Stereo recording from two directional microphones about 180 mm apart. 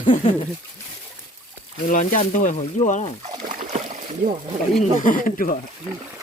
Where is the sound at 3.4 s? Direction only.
45° right (ahead or behind).